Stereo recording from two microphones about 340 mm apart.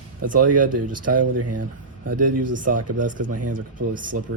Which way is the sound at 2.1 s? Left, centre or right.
Right.